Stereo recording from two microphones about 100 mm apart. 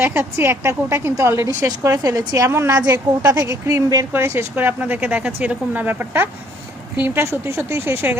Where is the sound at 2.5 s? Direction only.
25° right (ahead or behind).